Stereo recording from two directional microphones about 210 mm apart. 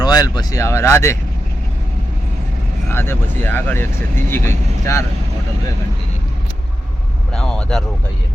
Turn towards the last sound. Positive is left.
turn(degrees=5)  # may be behind; listen again after turning